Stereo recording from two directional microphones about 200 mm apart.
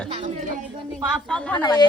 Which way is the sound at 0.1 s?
30° right (ahead or behind).